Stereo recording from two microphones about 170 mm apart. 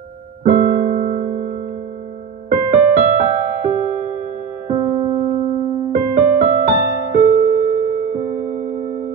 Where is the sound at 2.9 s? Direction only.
50° right (ahead or behind).